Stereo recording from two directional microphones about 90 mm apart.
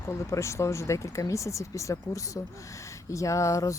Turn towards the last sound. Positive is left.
turn(degrees=35)  # may be behind; listen again after turning